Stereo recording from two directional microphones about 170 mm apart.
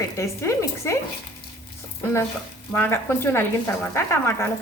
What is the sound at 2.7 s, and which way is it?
A woman's voice, 15° left (ahead or behind).